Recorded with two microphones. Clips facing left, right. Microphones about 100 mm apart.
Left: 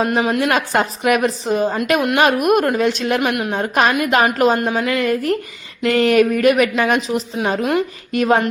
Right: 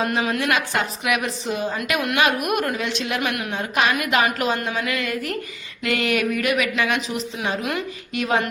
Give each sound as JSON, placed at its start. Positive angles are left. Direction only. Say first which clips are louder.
{"t": 0.0, "sound": "a woman's voice", "louder": "left 5 dB", "side_deg": 30}
{"t": 3.2, "sound": "a woman's voice", "louder": "left 6 dB", "side_deg": 30}